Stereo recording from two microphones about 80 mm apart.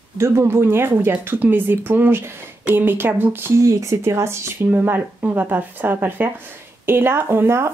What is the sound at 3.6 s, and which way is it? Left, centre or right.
Speech, right.